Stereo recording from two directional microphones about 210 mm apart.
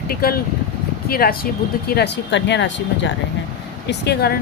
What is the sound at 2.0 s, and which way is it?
Speech, 55° left (ahead or behind).